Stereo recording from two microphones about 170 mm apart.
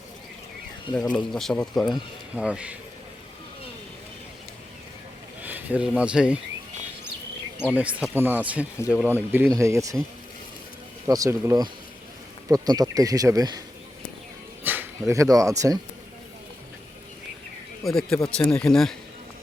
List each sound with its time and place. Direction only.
1.1 s speech: centre (ahead or behind)
5.4 s a sound: 10° right (ahead or behind)
6.0 s speech: 5° right (ahead or behind)
7.7 s speech: 10° right (ahead or behind)
11.0 s speech: 15° right (ahead or behind)
14.6 s speech: 10° right (ahead or behind)
17.8 s speech: 5° left (ahead or behind)